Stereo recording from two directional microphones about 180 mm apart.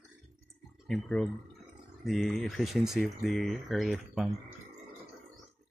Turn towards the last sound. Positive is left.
turn(degrees=0)  # may be behind; listen again after turning